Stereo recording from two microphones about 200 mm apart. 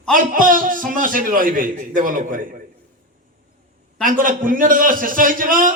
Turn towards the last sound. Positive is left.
turn(degrees=-45)  # may be behind; listen again after turning